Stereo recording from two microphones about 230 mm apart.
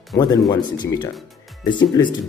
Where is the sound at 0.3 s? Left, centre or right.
Centre.